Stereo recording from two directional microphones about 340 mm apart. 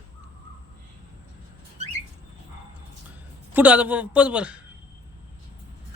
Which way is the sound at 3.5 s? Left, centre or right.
Centre.